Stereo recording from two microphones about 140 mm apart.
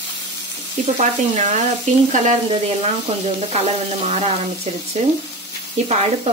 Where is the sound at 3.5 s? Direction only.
50° right (ahead or behind).